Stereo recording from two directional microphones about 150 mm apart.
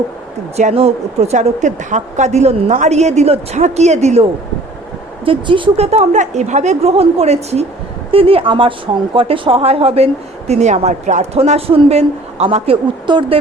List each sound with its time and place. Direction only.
0.5 s a woman's voice: 45° right (ahead or behind)
5.2 s a woman's voice: 35° right (ahead or behind)